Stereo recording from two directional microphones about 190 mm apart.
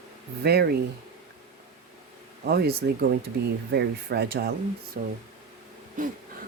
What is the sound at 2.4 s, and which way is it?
Speech, 55° right (ahead or behind).